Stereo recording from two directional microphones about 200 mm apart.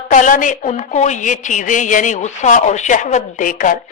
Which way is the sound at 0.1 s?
40° left (ahead or behind).